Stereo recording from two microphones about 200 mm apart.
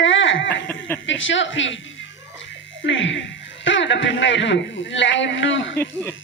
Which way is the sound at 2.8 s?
65° left (ahead or behind).